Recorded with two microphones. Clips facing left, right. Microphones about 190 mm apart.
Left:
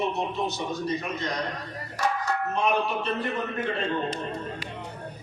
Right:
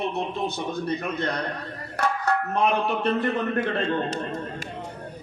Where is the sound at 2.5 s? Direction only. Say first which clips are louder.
Right 1 dB; 60° right (ahead or behind).